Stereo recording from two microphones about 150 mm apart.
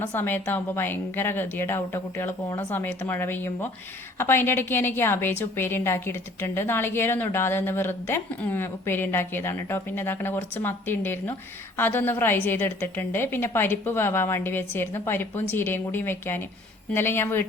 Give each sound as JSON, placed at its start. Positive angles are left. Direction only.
{"t": 0.0, "sound": "a woman's voice", "side_deg": 15}